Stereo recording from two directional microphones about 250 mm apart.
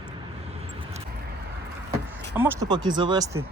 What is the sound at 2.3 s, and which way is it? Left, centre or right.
Speech, centre.